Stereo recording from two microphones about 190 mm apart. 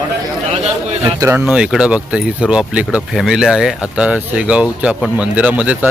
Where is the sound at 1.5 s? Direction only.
5° right (ahead or behind).